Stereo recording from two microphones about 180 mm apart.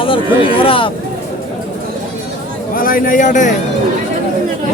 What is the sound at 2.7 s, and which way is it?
Speech, 50° left (ahead or behind).